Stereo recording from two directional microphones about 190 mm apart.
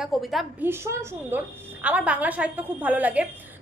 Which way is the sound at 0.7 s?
10° right (ahead or behind).